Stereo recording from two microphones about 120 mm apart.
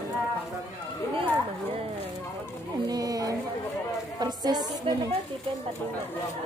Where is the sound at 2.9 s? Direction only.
30° right (ahead or behind).